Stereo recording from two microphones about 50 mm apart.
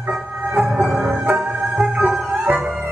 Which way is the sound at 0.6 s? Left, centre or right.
Centre.